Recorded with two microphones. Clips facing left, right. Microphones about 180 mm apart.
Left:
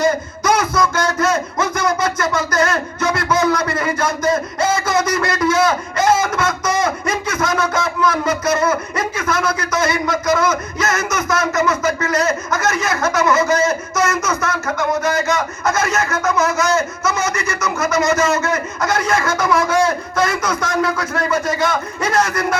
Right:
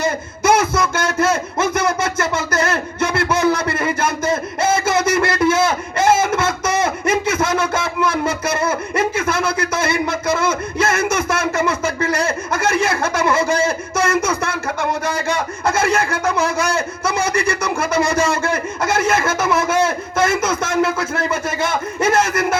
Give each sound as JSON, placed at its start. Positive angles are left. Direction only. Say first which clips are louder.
{"t": 0.0, "sound": "music", "louder": "left 2 dB", "side_deg": -25}